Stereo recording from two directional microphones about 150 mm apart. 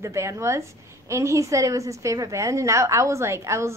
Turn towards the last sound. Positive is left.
turn(degrees=-20)  # may be behind; listen again after turning